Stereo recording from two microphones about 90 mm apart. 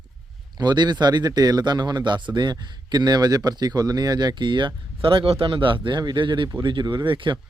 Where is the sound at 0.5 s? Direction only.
55° right (ahead or behind).